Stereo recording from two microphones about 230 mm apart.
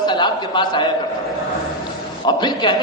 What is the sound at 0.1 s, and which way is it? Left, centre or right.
Speech, centre.